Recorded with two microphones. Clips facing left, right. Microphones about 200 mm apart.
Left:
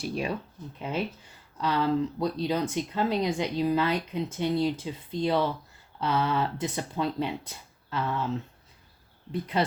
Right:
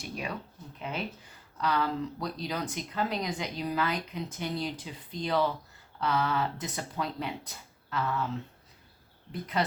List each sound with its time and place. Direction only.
0.0 s speech: 30° left (ahead or behind)
1.6 s speech: 25° left (ahead or behind)
9.3 s speech: 25° left (ahead or behind)